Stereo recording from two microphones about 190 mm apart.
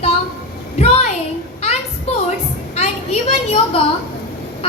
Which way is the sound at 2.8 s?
35° left (ahead or behind).